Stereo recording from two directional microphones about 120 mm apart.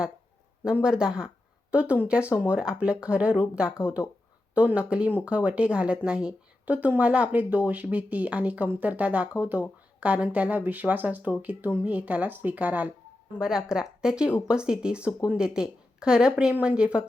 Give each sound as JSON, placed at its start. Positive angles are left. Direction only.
{"t": 0.6, "sound": "a woman's voice", "side_deg": -5}